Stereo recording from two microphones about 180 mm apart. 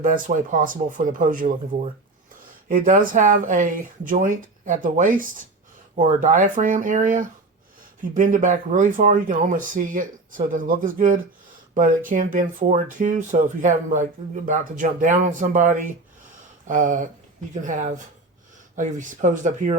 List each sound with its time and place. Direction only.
0.0 s speech: 45° right (ahead or behind)